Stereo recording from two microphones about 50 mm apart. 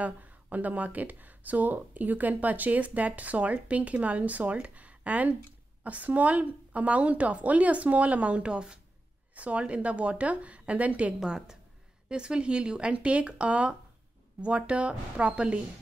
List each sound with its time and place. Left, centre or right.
0.0 s a woman's voice: right
9.3 s a woman's voice: right
11.1 s a woman's voice: centre